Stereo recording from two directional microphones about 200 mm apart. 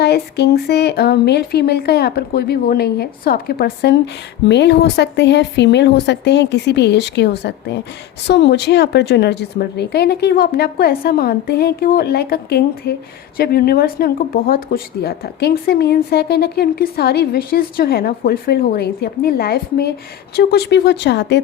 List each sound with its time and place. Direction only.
0.0 s a woman's voice: 55° left (ahead or behind)